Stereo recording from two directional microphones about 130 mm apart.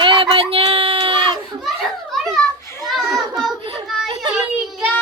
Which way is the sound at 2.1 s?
Centre (ahead or behind).